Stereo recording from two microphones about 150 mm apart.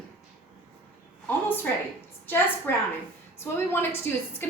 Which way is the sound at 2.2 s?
15° left (ahead or behind).